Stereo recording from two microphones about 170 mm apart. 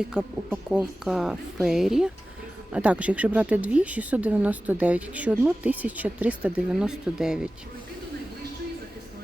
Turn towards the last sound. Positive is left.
turn(degrees=-5)  # may be behind; listen again after turning